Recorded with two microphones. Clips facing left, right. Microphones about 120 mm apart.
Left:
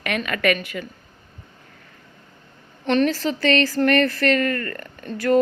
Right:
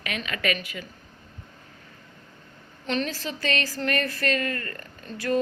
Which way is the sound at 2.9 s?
60° left (ahead or behind).